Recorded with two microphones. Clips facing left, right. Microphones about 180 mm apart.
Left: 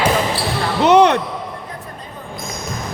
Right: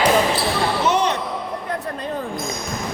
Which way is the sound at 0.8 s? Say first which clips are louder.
Left 11 dB; 65° left (ahead or behind).